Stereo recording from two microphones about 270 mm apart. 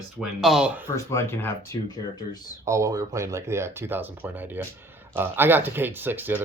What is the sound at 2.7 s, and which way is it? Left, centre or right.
Speech, centre.